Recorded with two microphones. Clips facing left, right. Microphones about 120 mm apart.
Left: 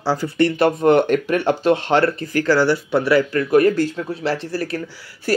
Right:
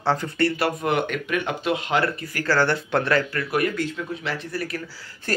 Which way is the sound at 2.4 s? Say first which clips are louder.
Left 4 dB; 10° left (ahead or behind).